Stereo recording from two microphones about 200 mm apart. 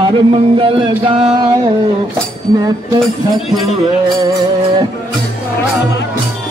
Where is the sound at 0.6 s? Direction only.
25° right (ahead or behind).